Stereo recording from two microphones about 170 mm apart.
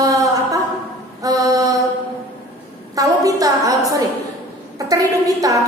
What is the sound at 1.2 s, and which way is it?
Mantra, 20° right (ahead or behind).